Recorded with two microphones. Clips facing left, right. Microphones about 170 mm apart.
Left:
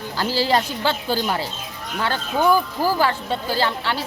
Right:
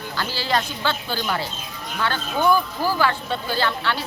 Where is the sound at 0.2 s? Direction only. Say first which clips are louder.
Left 5 dB; 35° left (ahead or behind).